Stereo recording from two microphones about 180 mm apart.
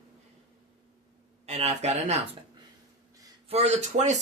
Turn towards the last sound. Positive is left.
turn(degrees=-40)  # may be behind; listen again after turning